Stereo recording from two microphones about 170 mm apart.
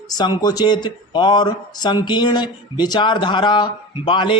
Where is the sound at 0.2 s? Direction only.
25° left (ahead or behind).